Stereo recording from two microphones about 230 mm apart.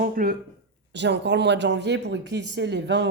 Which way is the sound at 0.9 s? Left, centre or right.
Right.